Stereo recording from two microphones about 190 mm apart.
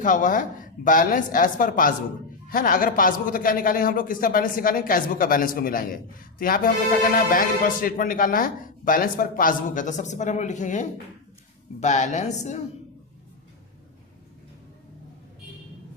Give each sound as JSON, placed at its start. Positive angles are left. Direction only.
{"t": 0.0, "sound": "a woman's voice", "side_deg": 45}